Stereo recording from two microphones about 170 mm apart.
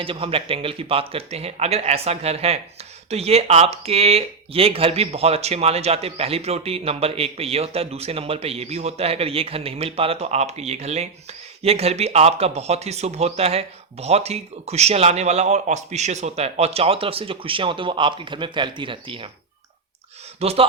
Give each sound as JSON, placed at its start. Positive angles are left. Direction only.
{"t": 0.0, "sound": "speech", "side_deg": -35}
{"t": 20.4, "sound": "speech", "side_deg": -35}